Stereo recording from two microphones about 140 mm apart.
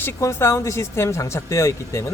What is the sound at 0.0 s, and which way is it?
A man's voice, 20° left (ahead or behind).